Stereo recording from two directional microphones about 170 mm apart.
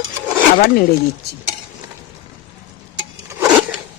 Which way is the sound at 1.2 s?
70° left (ahead or behind).